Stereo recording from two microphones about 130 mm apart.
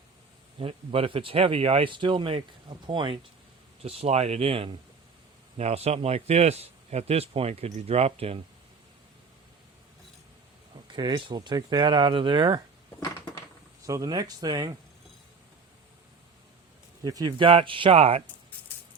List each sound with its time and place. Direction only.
0.6 s a man's voice: 50° right (ahead or behind)
3.8 s a man's voice: 50° right (ahead or behind)
5.5 s a man's voice: 55° right (ahead or behind)
10.9 s speech: 35° right (ahead or behind)
13.0 s crushing: 25° left (ahead or behind)
13.8 s speech: 25° right (ahead or behind)
17.0 s speech: 30° right (ahead or behind); by 18.2 s 50° right (ahead or behind)